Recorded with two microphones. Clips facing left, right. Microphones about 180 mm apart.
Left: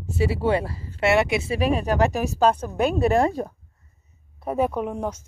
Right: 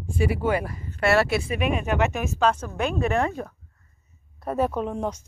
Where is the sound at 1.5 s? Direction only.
35° left (ahead or behind).